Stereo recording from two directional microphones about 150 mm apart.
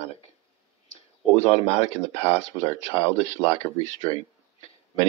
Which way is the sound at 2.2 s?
40° left (ahead or behind).